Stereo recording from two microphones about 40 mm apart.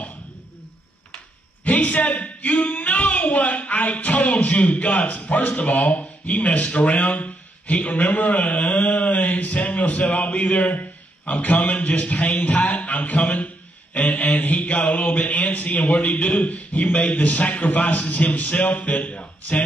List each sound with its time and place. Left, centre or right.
1.6 s a man's voice: left
10.8 s a sound: left
11.6 s a man's voice: left
13.9 s mantra: left
14.2 s a man's voice: left